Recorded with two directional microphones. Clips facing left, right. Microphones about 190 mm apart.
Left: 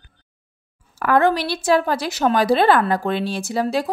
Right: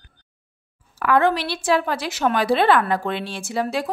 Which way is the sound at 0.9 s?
45° left (ahead or behind).